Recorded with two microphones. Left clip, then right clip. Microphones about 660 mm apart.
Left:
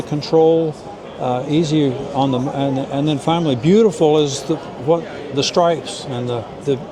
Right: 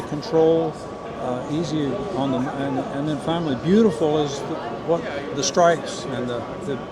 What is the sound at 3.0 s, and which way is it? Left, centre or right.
A man's voice, left.